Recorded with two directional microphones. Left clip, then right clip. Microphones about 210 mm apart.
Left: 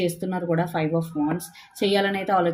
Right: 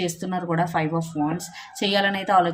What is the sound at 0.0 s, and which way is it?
Speech, 15° right (ahead or behind).